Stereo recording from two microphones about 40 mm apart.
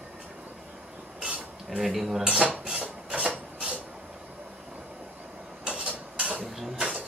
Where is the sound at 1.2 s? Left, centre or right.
Right.